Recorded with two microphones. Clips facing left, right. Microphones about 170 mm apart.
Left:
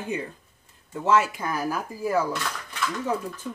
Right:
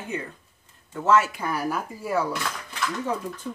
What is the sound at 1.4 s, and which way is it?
Speech, 5° left (ahead or behind).